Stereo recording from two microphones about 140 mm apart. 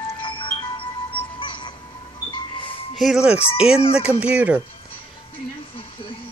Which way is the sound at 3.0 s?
5° right (ahead or behind).